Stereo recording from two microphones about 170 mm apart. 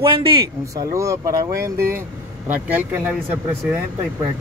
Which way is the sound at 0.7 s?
20° right (ahead or behind).